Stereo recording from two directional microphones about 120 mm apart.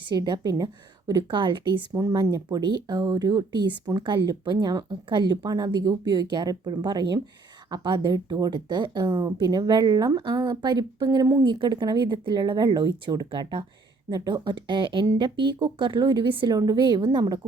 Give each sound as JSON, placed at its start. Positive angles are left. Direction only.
{"t": 0.1, "sound": "speech", "side_deg": -35}
{"t": 2.0, "sound": "speech", "side_deg": -30}
{"t": 11.4, "sound": "speech", "side_deg": -40}